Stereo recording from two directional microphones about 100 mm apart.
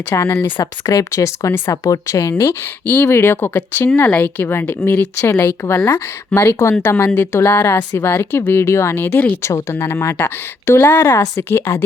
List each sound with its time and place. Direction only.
0.1 s a woman's voice: 30° left (ahead or behind)
9.4 s a woman's voice: 30° left (ahead or behind)